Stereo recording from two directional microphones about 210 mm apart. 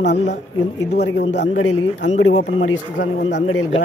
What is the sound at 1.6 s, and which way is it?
Speech, 65° left (ahead or behind).